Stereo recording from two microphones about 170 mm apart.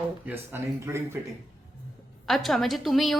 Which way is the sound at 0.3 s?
15° right (ahead or behind).